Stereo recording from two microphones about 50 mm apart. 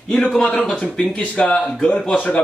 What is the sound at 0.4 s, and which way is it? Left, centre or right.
Speech, left.